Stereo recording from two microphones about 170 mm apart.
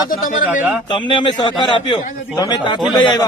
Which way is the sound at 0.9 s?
30° left (ahead or behind).